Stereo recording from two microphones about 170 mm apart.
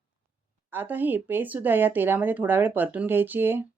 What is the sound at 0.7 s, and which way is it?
Speech, 10° right (ahead or behind).